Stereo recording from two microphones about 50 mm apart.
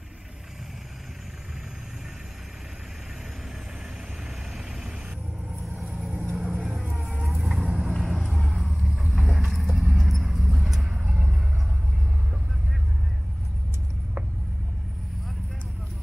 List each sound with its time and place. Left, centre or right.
5.8 s vehicle: centre
6.5 s music: centre
6.9 s vehicle: centre
7.6 s vehicle: centre
8.0 s vehicle: centre
10.9 s vehicle: right